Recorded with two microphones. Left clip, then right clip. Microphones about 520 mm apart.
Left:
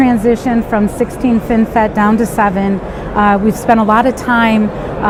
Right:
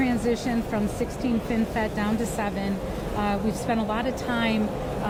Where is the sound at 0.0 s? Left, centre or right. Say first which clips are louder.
Left 13 dB; left.